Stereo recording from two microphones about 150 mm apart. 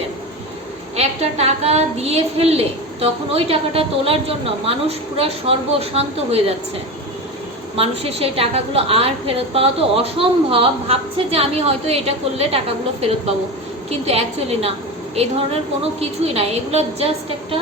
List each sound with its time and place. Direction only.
0.9 s a woman's voice: 45° right (ahead or behind)
7.8 s a woman's voice: 40° right (ahead or behind)
16.0 s a woman's voice: 45° right (ahead or behind)